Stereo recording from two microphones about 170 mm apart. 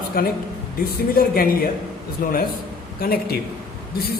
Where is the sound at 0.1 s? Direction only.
60° left (ahead or behind).